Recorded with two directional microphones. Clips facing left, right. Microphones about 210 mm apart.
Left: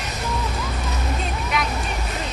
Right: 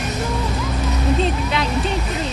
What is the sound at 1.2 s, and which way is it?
Music, 30° right (ahead or behind).